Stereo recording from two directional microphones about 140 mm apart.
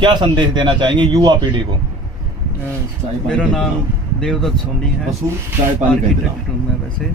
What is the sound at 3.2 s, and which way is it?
Speech, 5° left (ahead or behind).